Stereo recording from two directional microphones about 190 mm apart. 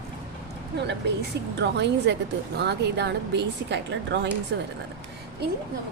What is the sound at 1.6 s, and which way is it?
Speech, 65° right (ahead or behind).